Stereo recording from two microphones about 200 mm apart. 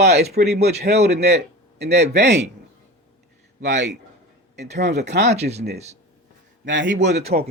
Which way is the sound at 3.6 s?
60° right (ahead or behind).